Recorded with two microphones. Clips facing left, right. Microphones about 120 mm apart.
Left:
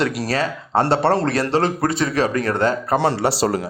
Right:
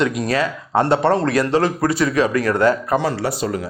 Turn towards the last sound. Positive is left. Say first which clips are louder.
# left 1 dB
turn(degrees=30)  # may be behind; listen again after turning